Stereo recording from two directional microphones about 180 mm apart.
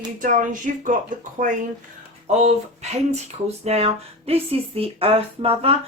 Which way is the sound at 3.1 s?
35° right (ahead or behind).